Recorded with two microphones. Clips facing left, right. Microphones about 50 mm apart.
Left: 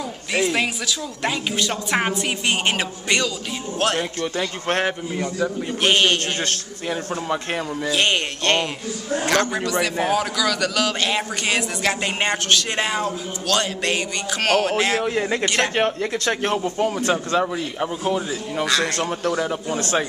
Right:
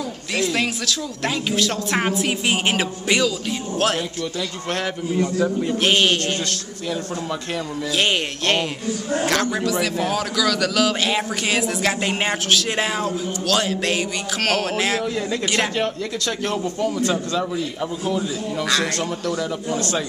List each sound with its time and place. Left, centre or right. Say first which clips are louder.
0.5 s a man's voice: even; centre
4.4 s a man's voice: left 4 dB; left
5.2 s a man's voice: right 3 dB; centre
6.4 s speech: left 1 dB; left
7.9 s a man's voice: even; centre
15.0 s speech: left 2 dB; left